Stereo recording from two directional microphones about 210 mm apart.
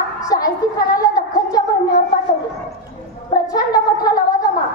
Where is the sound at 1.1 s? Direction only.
15° left (ahead or behind).